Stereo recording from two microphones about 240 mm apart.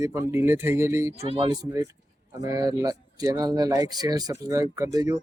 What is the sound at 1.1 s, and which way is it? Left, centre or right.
Speech, right.